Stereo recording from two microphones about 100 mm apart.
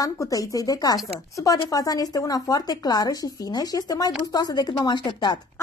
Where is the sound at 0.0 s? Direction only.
35° left (ahead or behind).